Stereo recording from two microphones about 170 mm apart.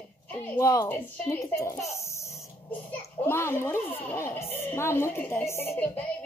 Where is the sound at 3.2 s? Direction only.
15° left (ahead or behind).